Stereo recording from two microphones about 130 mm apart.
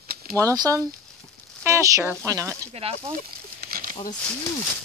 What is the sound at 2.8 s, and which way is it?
Speech, 50° right (ahead or behind).